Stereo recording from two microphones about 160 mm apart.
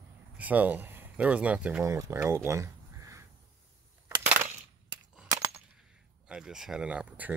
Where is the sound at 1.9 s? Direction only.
20° right (ahead or behind).